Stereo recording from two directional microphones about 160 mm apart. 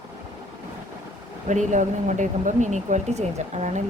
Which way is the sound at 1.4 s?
50° right (ahead or behind).